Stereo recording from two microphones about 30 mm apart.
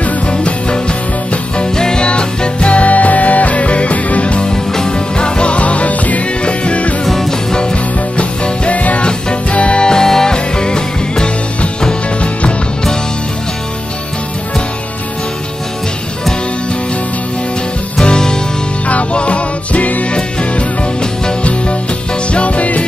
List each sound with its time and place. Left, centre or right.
0.3 s music: left
4.3 s music: left
6.4 s music: left
7.2 s music: left
7.7 s music: left
9.8 s music: centre
12.2 s music: left
18.0 s music: left
18.9 s music: left
20.1 s music: left
22.3 s music: left